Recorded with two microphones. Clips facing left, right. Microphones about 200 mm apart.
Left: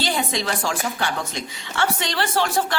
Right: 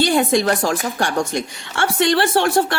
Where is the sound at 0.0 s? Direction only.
50° right (ahead or behind).